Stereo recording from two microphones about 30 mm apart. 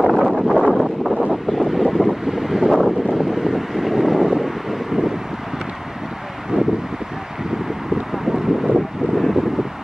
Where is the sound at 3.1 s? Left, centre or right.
Centre.